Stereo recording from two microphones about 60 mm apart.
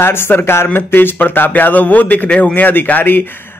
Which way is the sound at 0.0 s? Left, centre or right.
Left.